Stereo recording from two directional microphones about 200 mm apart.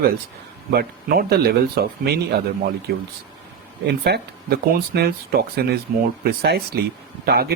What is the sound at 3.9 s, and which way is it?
Speech, 55° right (ahead or behind).